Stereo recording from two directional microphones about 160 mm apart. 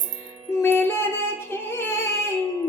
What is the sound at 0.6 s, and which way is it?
Music, 15° left (ahead or behind).